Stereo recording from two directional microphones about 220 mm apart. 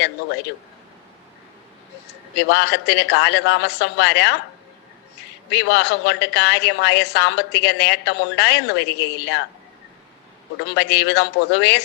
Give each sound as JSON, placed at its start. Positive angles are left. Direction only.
{"t": 2.3, "sound": "a woman's voice", "side_deg": 50}
{"t": 5.5, "sound": "a woman's voice", "side_deg": 50}
{"t": 10.8, "sound": "a woman's voice", "side_deg": 50}